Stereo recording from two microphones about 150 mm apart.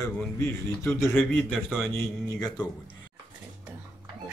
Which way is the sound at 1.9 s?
20° left (ahead or behind).